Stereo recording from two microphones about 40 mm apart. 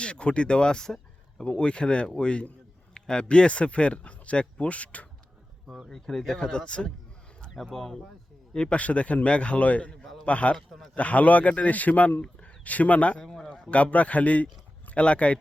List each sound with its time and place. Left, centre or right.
0.0 s speech: left
5.9 s speech: centre
8.5 s speech: left
8.8 s a man's voice: left
10.0 s a sound: centre
10.2 s a man's voice: left
13.2 s a sound: centre
13.7 s a man's voice: left